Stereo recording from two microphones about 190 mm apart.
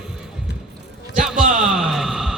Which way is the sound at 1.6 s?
5° right (ahead or behind).